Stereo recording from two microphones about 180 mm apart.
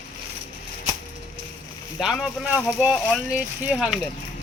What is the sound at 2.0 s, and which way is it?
Speech, centre (ahead or behind).